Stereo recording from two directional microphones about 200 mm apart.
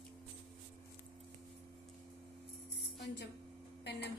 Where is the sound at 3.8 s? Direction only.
60° left (ahead or behind).